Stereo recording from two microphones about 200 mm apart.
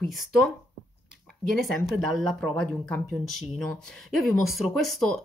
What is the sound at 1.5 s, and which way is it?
Speech, centre (ahead or behind).